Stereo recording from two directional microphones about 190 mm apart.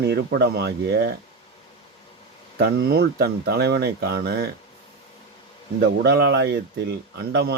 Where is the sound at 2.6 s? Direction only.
55° right (ahead or behind).